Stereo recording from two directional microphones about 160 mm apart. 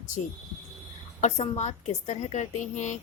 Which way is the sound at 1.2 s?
45° left (ahead or behind).